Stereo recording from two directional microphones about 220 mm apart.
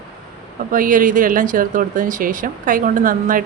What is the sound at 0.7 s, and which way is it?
Speech, 40° right (ahead or behind).